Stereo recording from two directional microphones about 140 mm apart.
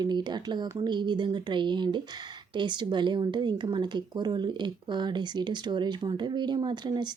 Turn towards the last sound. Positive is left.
turn(degrees=-30)  # may be behind; listen again after turning